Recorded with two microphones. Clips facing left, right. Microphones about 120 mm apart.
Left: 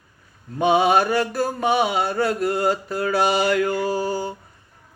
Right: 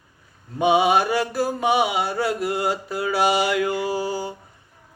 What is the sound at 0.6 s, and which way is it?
Mantra, 15° right (ahead or behind).